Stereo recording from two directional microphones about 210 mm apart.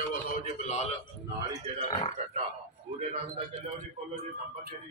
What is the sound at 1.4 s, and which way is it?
Speech, 20° right (ahead or behind).